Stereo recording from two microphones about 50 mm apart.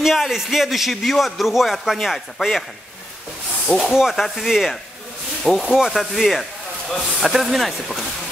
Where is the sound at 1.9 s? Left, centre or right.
Centre.